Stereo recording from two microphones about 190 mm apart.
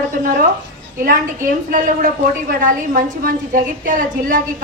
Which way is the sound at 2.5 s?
45° right (ahead or behind).